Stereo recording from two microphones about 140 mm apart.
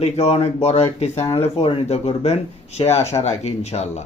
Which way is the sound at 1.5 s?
45° left (ahead or behind).